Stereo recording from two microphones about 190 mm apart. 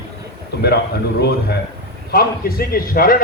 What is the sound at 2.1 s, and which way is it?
Speech, 50° left (ahead or behind).